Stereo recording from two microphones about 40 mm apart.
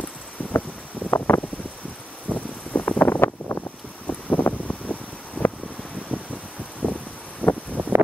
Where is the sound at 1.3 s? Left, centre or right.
Left.